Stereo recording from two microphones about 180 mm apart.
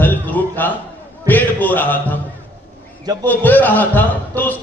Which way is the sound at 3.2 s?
10° left (ahead or behind).